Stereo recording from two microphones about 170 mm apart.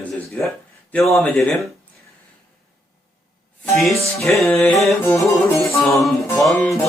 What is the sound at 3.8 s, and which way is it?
Speech, centre (ahead or behind).